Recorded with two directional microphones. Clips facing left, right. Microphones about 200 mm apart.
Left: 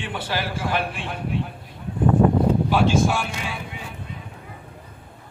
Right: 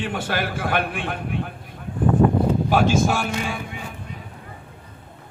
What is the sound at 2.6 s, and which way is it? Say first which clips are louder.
Speech: right 1 dB; 45° right (ahead or behind).